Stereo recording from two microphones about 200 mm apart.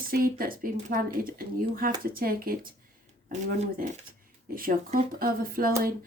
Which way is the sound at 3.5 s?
35° right (ahead or behind).